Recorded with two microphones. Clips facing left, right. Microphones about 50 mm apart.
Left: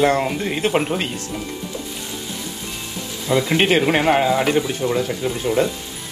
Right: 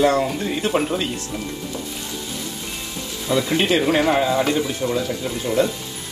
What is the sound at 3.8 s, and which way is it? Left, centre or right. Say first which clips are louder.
Speech: left 1 dB; left.